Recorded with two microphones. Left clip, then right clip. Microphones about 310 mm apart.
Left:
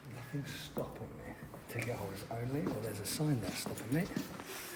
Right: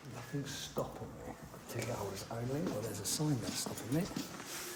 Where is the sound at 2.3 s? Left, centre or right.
Centre.